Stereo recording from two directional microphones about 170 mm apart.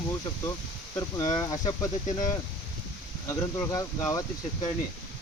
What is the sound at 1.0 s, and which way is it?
Speech, 20° left (ahead or behind).